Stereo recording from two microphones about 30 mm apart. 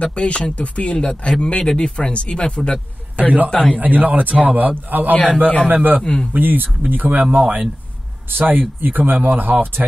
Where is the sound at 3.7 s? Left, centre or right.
Right.